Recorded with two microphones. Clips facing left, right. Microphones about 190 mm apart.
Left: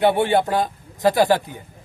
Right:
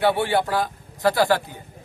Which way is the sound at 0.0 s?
20° left (ahead or behind).